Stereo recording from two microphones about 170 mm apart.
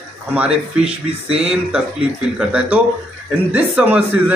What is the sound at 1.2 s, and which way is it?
Speech, 35° right (ahead or behind).